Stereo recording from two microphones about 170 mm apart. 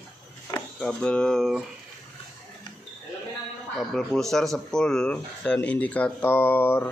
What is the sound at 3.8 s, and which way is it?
Speech, centre (ahead or behind).